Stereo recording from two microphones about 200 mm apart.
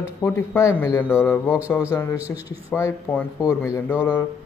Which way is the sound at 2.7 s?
15° left (ahead or behind).